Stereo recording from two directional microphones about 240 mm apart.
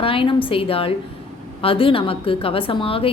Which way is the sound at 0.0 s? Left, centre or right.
Left.